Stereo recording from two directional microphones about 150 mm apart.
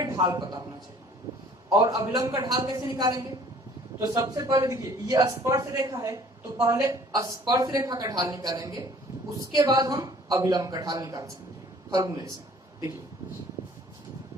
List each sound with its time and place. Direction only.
0.0 s a man's voice: 25° right (ahead or behind)
1.8 s a woman's voice: 25° right (ahead or behind)